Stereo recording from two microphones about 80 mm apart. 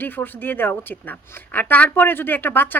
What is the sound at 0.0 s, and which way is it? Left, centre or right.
A woman's voice, left.